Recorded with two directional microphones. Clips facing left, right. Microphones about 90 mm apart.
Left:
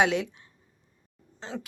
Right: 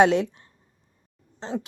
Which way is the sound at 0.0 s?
35° right (ahead or behind).